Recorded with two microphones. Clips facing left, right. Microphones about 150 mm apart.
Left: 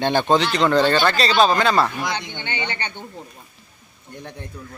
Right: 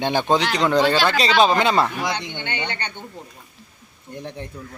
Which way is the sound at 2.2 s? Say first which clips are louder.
Even; 10° left (ahead or behind).